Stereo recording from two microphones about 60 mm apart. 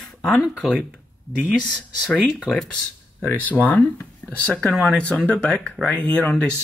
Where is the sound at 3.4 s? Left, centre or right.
Left.